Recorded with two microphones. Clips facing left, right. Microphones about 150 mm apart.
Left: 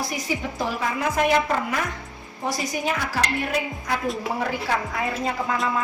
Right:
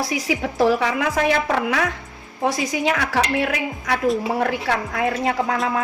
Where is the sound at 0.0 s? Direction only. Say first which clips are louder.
Right 5 dB; 90° right.